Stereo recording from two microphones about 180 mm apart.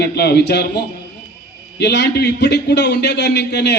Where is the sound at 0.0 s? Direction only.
60° left (ahead or behind).